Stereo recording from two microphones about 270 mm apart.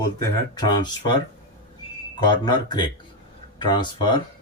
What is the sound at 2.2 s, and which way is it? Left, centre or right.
Speech, centre.